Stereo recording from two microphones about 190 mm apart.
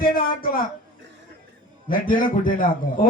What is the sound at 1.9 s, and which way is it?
A man's voice, 45° left (ahead or behind).